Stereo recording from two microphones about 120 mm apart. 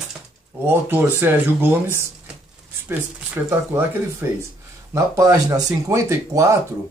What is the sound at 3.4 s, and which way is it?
Speech, 20° right (ahead or behind).